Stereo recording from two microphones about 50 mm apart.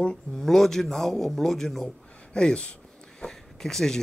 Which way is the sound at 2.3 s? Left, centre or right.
Centre.